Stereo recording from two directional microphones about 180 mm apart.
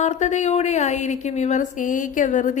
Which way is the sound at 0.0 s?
40° left (ahead or behind).